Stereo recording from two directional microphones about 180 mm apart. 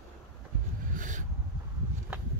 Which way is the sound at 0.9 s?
45° right (ahead or behind).